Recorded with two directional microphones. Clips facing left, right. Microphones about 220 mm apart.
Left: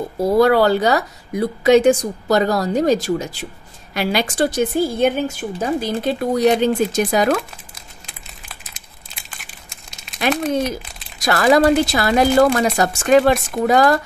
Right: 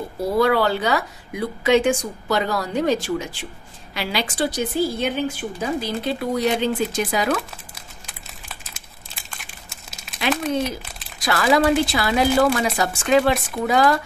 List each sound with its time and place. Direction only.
0.2 s a woman's voice: 40° left (ahead or behind)
9.1 s crumpling: centre (ahead or behind)
11.1 s a woman's voice: 45° left (ahead or behind)